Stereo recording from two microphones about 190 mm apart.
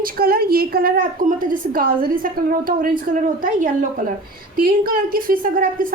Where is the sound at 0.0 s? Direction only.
50° right (ahead or behind).